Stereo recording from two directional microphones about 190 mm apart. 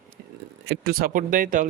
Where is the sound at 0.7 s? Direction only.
50° right (ahead or behind).